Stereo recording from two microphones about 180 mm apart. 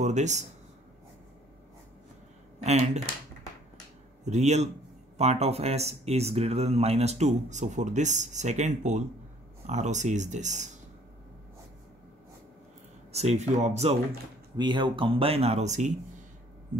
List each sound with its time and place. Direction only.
0.0 s speech: 40° right (ahead or behind)
2.6 s speech: 40° right (ahead or behind)
4.2 s speech: 40° right (ahead or behind)
13.1 s speech: 35° right (ahead or behind)
14.6 s speech: 25° right (ahead or behind)